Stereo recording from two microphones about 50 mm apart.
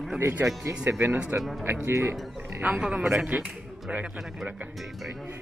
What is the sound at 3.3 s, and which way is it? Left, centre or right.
Speech, right.